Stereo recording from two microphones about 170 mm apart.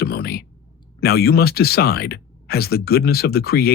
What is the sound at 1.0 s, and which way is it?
Speech, 65° left (ahead or behind).